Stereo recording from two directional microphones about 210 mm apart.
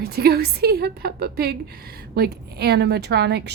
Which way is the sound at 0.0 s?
50° right (ahead or behind).